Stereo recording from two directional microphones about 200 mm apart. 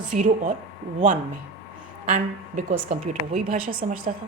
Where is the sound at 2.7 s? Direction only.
35° right (ahead or behind).